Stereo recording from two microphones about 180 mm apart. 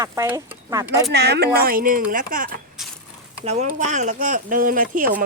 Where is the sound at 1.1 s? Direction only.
65° right (ahead or behind).